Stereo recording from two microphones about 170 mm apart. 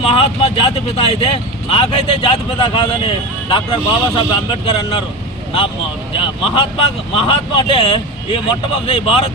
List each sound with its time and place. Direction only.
0.0 s speech: 35° left (ahead or behind)
6.1 s speech: 30° left (ahead or behind)